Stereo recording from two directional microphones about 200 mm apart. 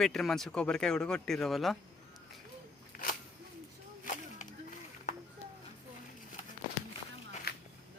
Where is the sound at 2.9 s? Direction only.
45° left (ahead or behind).